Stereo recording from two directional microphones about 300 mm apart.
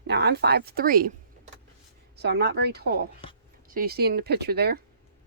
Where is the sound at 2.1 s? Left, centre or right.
Right.